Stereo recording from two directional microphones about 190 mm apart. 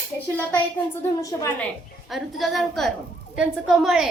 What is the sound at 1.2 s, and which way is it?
Speech, 15° left (ahead or behind).